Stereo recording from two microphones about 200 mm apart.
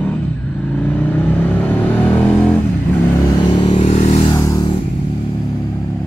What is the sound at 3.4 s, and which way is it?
Vehicle, 25° left (ahead or behind).